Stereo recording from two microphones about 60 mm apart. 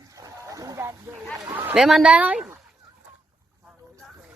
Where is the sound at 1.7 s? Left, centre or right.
Centre.